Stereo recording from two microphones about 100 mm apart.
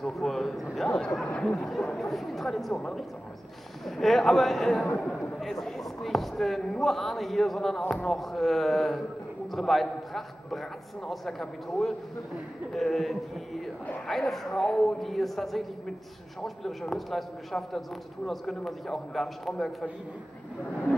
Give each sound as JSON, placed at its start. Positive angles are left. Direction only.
{"t": 0.0, "sound": "a man's voice", "side_deg": 5}